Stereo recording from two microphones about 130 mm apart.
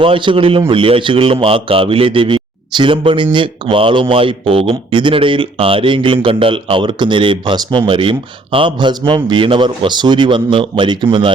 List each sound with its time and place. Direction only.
0.0 s a man's voice: 40° right (ahead or behind)